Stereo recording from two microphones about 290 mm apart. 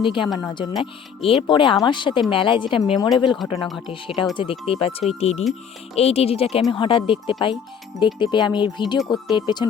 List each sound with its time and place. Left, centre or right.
0.0 s speech: centre